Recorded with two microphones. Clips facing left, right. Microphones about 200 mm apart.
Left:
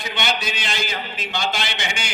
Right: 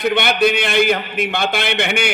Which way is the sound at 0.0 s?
60° right (ahead or behind).